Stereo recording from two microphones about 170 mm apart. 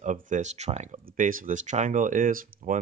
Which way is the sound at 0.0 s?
45° right (ahead or behind).